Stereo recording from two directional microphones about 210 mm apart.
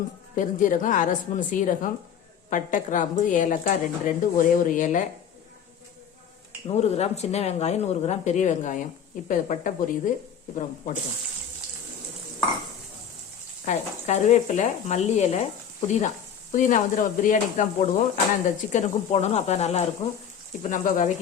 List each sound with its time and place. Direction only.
0.3 s a woman's voice: 40° left (ahead or behind)
6.7 s a woman's voice: 30° left (ahead or behind)
13.7 s a woman's voice: 35° left (ahead or behind)